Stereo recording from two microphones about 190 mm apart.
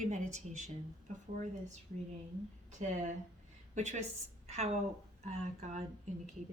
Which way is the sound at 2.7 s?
40° right (ahead or behind).